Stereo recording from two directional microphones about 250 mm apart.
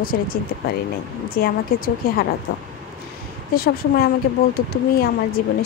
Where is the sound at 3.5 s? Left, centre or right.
Left.